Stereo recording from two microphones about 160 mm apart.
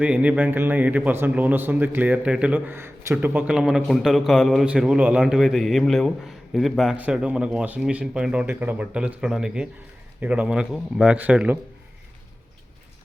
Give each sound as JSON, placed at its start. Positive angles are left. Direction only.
{"t": 0.0, "sound": "speech", "side_deg": -10}